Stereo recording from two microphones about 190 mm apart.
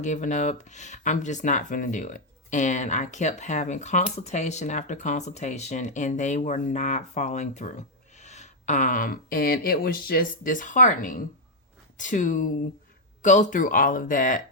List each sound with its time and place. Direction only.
0.0 s speech: 40° left (ahead or behind)